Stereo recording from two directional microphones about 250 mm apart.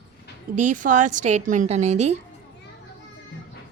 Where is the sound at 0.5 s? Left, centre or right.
Right.